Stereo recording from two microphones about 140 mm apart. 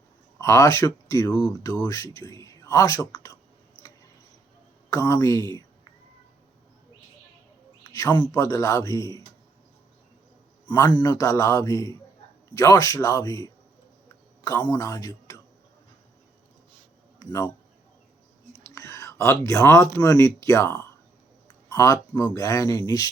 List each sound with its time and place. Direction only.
0.3 s speech: 20° left (ahead or behind)
4.9 s speech: 20° left (ahead or behind)
7.9 s speech: 25° left (ahead or behind)
10.7 s speech: 30° left (ahead or behind)
17.2 s speech: 25° left (ahead or behind)
18.6 s a sound: 20° left (ahead or behind)
20.0 s speech: 20° left (ahead or behind)